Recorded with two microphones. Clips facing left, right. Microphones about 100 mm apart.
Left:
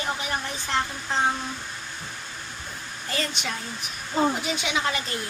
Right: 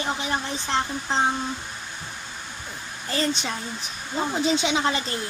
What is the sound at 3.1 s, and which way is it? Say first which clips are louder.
Speech: right 4 dB; 30° right (ahead or behind).